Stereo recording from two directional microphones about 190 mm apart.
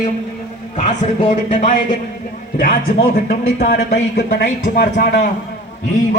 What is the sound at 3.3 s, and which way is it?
Speech, 35° left (ahead or behind).